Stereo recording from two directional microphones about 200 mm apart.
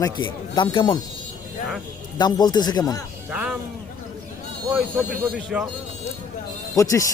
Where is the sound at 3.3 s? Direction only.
5° right (ahead or behind).